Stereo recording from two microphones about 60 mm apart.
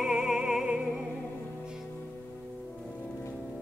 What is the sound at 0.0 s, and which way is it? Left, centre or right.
Music, centre.